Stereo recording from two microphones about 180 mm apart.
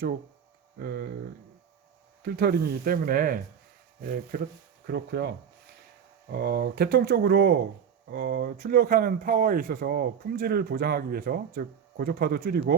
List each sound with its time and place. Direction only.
0.8 s speech: 60° right (ahead or behind)
2.2 s speech: 60° right (ahead or behind)
4.9 s speech: 65° right (ahead or behind)
6.3 s speech: 60° right (ahead or behind)